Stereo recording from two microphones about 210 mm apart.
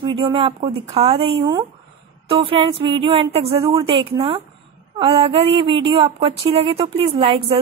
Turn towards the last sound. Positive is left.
turn(degrees=-25)  # may be behind; listen again after turning